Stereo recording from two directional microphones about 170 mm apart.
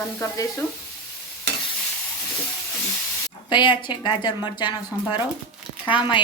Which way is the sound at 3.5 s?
25° left (ahead or behind).